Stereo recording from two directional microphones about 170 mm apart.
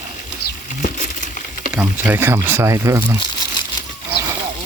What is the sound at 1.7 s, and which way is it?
Speech, 10° right (ahead or behind).